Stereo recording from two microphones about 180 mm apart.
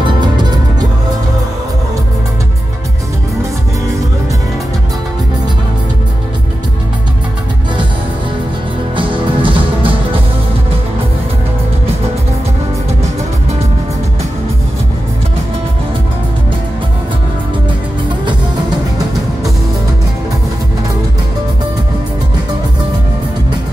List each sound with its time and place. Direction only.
0.0 s music: 25° right (ahead or behind)
8.9 s music: 30° right (ahead or behind)